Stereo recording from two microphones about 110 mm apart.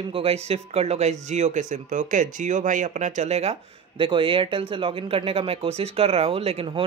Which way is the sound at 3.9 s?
55° right (ahead or behind).